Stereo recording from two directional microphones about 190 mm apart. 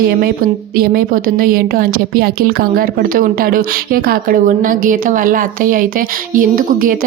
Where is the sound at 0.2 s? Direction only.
50° right (ahead or behind).